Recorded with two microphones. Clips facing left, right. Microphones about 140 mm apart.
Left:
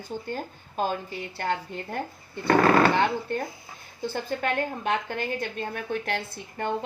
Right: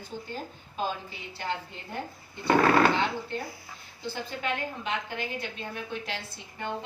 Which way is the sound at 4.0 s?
50° left (ahead or behind).